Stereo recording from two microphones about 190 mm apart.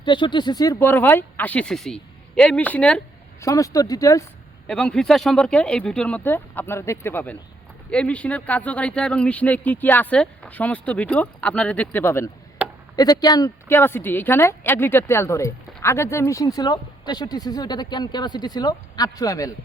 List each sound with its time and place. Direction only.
0.0 s speech: 25° left (ahead or behind); by 3.0 s 5° left (ahead or behind)
3.4 s speech: 15° left (ahead or behind)
4.6 s a woman's voice: 5° left (ahead or behind)